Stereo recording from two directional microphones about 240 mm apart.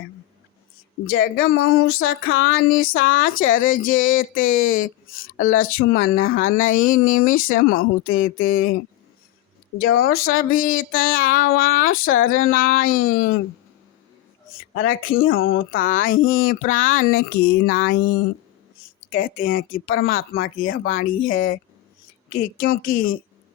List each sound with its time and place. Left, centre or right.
1.1 s speech: left
10.0 s speech: left
14.5 s speech: left